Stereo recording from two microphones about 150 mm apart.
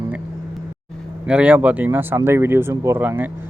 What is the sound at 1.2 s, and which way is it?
Speech, 10° right (ahead or behind).